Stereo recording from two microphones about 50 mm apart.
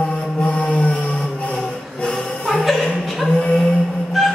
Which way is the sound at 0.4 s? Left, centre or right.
Left.